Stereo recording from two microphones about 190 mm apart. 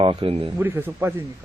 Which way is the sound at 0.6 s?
10° right (ahead or behind).